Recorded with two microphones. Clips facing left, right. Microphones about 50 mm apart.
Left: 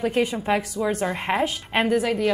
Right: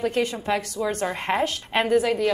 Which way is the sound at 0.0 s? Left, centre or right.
Centre.